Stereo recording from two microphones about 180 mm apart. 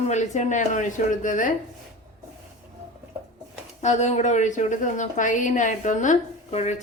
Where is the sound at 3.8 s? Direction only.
40° left (ahead or behind).